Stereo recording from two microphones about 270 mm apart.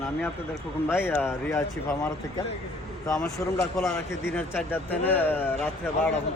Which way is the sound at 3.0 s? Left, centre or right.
Centre.